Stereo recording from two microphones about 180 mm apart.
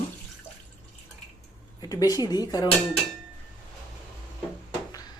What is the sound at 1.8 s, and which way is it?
Speech, 20° left (ahead or behind).